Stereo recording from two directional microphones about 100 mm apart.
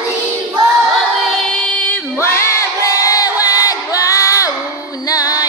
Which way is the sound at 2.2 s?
30° left (ahead or behind).